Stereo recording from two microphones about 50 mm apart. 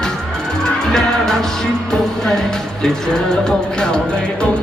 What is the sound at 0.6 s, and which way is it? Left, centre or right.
Music, centre.